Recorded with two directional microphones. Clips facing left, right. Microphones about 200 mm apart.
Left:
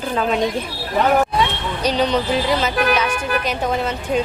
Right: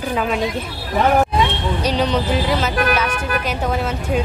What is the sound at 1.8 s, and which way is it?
A woman's voice, 5° right (ahead or behind).